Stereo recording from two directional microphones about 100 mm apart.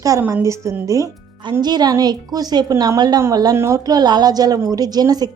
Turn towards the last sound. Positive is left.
turn(degrees=-40)  # may be behind; listen again after turning